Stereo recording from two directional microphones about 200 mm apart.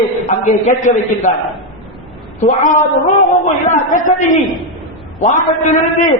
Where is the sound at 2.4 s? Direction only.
40° left (ahead or behind).